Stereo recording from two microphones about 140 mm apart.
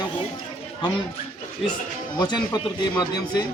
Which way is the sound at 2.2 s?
30° left (ahead or behind).